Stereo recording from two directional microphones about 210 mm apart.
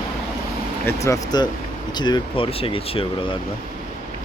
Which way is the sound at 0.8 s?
15° left (ahead or behind).